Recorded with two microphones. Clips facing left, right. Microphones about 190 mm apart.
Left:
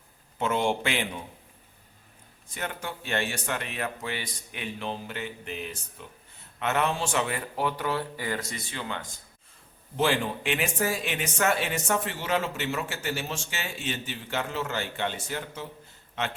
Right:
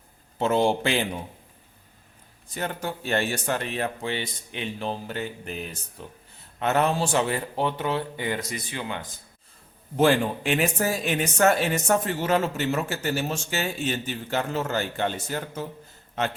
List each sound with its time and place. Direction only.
0.3 s speech: 35° right (ahead or behind)
2.6 s speech: 40° right (ahead or behind); by 9.0 s 15° right (ahead or behind)
10.0 s speech: 45° right (ahead or behind)